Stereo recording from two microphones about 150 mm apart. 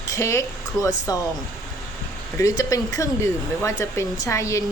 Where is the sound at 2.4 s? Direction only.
20° left (ahead or behind).